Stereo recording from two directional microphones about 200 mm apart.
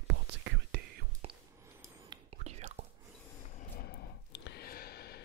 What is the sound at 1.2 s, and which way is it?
Whispering, 30° right (ahead or behind).